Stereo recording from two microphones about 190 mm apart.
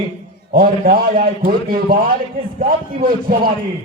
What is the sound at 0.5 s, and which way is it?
A man's voice, 50° right (ahead or behind).